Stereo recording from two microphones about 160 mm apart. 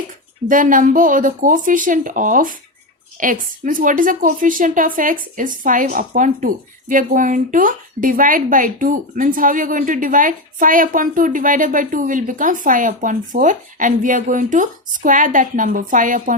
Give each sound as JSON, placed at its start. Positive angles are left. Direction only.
{"t": 0.4, "sound": "a woman's voice", "side_deg": -55}